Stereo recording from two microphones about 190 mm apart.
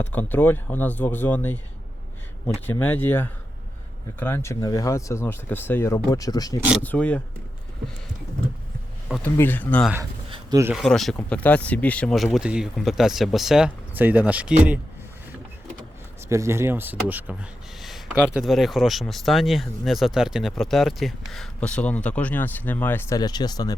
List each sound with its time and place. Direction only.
0.0 s speech: 10° left (ahead or behind)
6.8 s speech: 10° left (ahead or behind)
9.0 s speech: centre (ahead or behind)
10.2 s a sound: 25° right (ahead or behind)
10.6 s speech: 10° right (ahead or behind)
10.8 s speech: centre (ahead or behind)
16.3 s speech: 15° right (ahead or behind)
18.3 s speech: centre (ahead or behind); by 23.7 s 20° left (ahead or behind)